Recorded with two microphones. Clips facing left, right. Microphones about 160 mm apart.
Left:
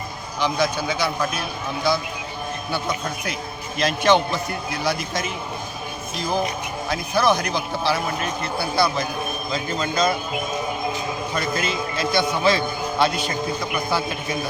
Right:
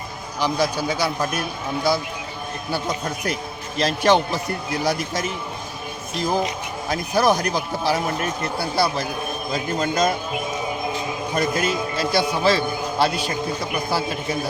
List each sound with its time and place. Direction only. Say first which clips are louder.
0.3 s speech: even; 40° right (ahead or behind)
6.9 s speech: right 1 dB; 40° right (ahead or behind)
11.3 s a man's voice: right 4 dB; 40° right (ahead or behind)